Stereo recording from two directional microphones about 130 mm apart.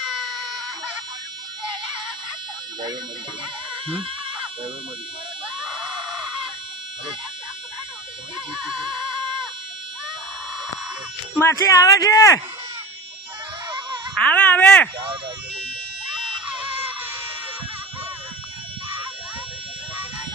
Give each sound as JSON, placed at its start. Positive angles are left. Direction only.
{"t": 3.8, "sound": "a sound", "side_deg": -45}
{"t": 11.3, "sound": "speech", "side_deg": 20}
{"t": 13.7, "sound": "wail", "side_deg": -15}
{"t": 14.2, "sound": "speech", "side_deg": 10}
{"t": 16.1, "sound": "music", "side_deg": -5}
{"t": 16.6, "sound": "music", "side_deg": -15}